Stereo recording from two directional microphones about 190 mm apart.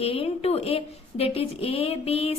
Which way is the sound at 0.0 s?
30° left (ahead or behind).